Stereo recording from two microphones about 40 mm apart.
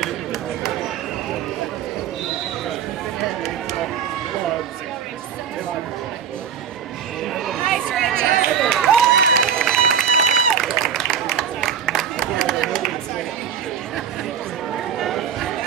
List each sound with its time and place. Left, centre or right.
0.0 s a sound: centre
3.2 s run: centre
7.5 s chatter: centre
8.5 s run: centre
11.2 s a sound: centre
15.0 s chatter: centre